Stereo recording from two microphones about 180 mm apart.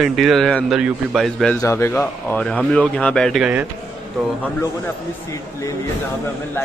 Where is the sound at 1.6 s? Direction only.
15° left (ahead or behind); by 3.6 s 5° right (ahead or behind).